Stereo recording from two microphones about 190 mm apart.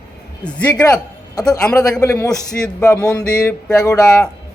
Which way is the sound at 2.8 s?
20° left (ahead or behind).